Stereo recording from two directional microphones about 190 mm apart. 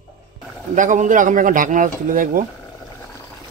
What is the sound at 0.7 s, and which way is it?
A man's voice, 40° right (ahead or behind).